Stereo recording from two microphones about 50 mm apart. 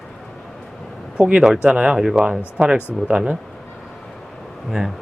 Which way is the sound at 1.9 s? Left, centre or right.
Centre.